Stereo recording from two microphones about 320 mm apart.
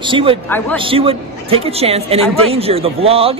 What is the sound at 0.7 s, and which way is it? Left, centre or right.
Speech, centre.